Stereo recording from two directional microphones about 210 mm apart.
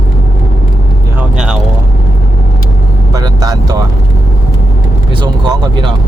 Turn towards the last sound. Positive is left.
turn(degrees=-20)  # may be behind; listen again after turning